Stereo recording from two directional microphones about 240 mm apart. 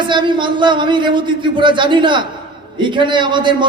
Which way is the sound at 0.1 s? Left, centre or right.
Centre.